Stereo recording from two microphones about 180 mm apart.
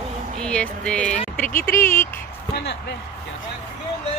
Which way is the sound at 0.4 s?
5° left (ahead or behind).